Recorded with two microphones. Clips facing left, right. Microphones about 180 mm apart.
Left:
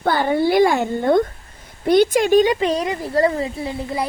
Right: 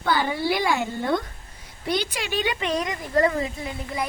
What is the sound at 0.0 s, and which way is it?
Speech, 50° left (ahead or behind).